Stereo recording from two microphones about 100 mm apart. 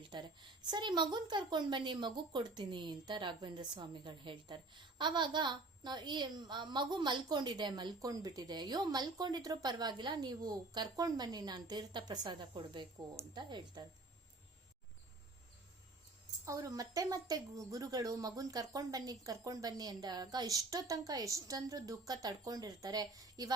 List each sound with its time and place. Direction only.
0.1 s a woman's voice: 50° right (ahead or behind)
16.5 s a woman's voice: 35° right (ahead or behind)